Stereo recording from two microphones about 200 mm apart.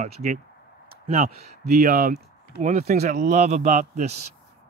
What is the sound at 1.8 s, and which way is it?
Speech, 45° right (ahead or behind).